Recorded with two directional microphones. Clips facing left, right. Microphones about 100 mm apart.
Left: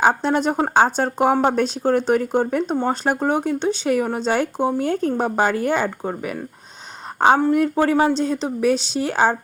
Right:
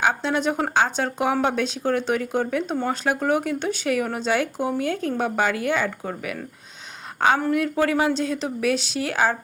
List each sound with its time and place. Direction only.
0.0 s speech: 40° left (ahead or behind)